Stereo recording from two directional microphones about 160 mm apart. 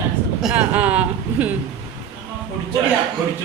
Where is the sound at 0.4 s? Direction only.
10° right (ahead or behind).